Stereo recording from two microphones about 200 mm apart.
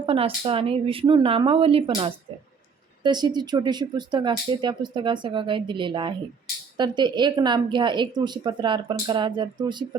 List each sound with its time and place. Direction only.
0.0 s speech: 30° right (ahead or behind)